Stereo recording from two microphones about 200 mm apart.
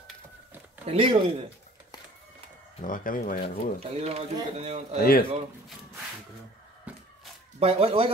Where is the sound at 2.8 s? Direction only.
45° left (ahead or behind).